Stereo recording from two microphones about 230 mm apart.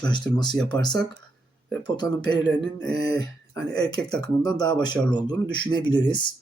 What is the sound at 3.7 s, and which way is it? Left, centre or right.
Speech, centre.